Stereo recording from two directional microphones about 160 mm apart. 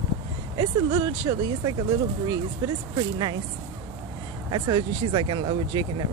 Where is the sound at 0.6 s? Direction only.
25° right (ahead or behind).